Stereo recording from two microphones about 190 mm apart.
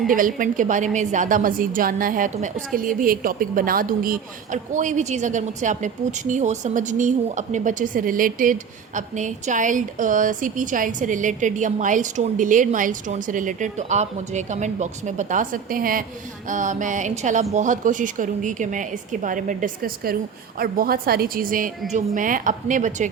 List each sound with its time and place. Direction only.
0.1 s a woman's voice: 45° right (ahead or behind)
16.5 s music: 40° right (ahead or behind)
17.5 s a woman's voice: 40° right (ahead or behind)